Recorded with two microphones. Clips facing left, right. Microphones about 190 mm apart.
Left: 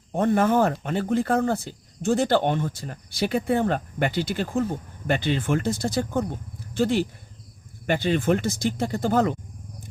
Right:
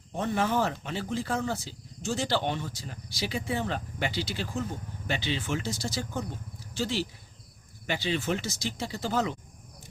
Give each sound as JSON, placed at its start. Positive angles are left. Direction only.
{"t": 0.1, "sound": "speech", "side_deg": 50}